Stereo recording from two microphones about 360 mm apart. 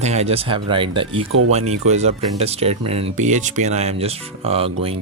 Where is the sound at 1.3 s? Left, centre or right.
Right.